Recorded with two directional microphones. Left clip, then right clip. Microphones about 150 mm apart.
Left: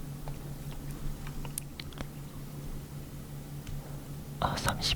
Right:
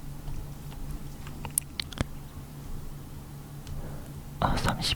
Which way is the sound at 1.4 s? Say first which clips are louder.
Right 12 dB; 25° right (ahead or behind).